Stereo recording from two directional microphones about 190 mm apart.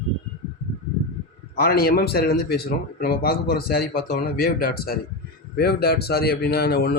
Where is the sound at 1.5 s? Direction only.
55° left (ahead or behind).